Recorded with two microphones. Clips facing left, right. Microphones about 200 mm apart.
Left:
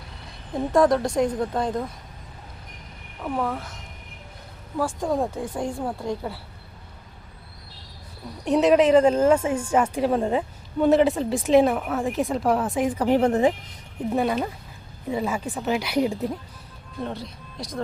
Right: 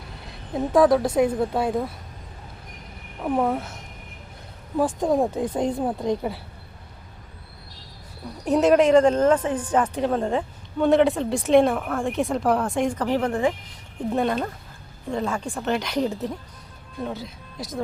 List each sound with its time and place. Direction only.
0.5 s a woman's voice: 5° right (ahead or behind)
3.2 s speech: 20° right (ahead or behind)
4.8 s speech: 20° right (ahead or behind)
8.4 s a woman's voice: centre (ahead or behind)
13.1 s speech: 20° left (ahead or behind)
14.1 s a woman's voice: 5° left (ahead or behind)
17.0 s a woman's voice: centre (ahead or behind)